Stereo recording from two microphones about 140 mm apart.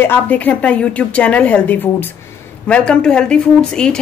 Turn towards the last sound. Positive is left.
turn(degrees=5)  # may be behind; listen again after turning